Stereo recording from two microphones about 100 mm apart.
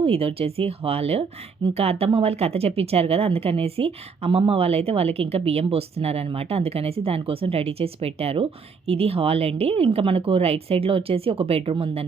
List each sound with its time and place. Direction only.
0.0 s a woman's voice: 75° right (ahead or behind)